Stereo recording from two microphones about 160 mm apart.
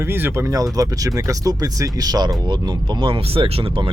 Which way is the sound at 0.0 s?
15° right (ahead or behind).